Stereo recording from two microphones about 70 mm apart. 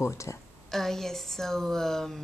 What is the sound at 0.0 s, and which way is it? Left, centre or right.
Speech, left.